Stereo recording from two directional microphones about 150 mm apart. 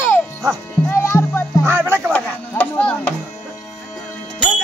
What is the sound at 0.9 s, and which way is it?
Music, 15° left (ahead or behind).